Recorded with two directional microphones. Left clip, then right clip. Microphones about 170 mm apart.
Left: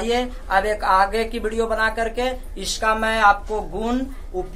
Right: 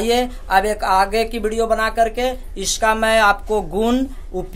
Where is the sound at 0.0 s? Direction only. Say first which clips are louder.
Right 4 dB; 60° right (ahead or behind).